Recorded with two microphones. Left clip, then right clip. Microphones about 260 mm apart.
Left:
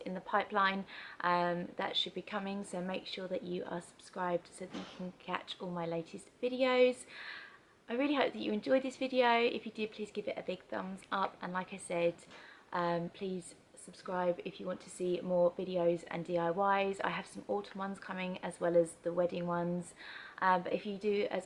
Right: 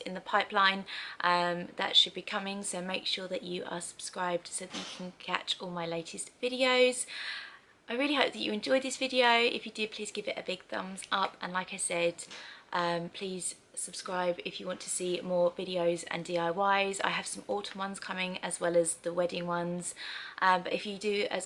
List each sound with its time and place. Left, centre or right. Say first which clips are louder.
0.0 s a woman's voice: right 4 dB; centre
15.3 s speech: right 2 dB; left
15.5 s a woman's voice: right 2 dB; centre